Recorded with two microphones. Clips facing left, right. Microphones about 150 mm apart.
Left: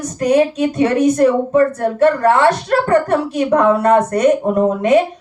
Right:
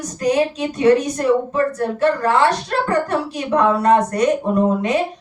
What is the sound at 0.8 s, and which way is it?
A woman's voice, 45° left (ahead or behind).